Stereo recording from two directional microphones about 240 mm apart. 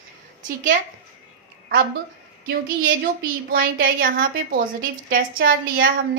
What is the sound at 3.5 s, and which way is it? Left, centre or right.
A woman's voice, right.